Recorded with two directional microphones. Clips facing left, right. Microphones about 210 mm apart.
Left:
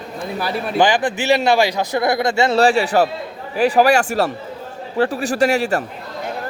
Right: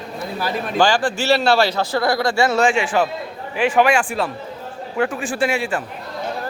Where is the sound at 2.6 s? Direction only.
35° left (ahead or behind).